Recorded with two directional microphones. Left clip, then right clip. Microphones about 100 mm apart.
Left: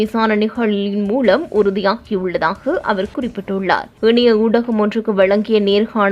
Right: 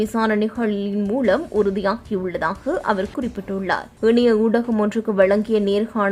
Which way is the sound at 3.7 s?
10° left (ahead or behind).